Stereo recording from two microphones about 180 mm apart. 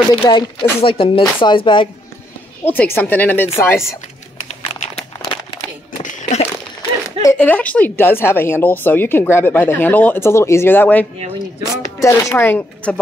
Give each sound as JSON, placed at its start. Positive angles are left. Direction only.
{"t": 0.1, "sound": "speech", "side_deg": 25}
{"t": 2.6, "sound": "speech", "side_deg": 10}
{"t": 5.2, "sound": "crumpling", "side_deg": 25}
{"t": 6.1, "sound": "a sound", "side_deg": 45}
{"t": 7.2, "sound": "speech", "side_deg": 15}